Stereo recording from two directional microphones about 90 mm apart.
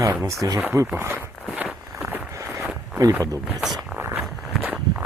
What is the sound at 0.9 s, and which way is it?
Speech, 30° right (ahead or behind).